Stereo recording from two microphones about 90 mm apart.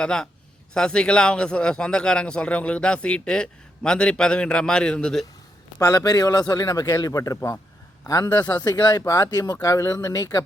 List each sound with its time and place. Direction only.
0.0 s speech: 10° left (ahead or behind)
5.8 s speech: 40° left (ahead or behind)